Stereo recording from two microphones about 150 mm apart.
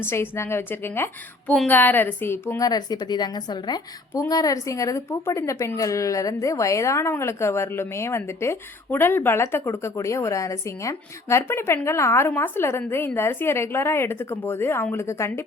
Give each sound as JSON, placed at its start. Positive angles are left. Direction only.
{"t": 0.0, "sound": "a woman's voice", "side_deg": 15}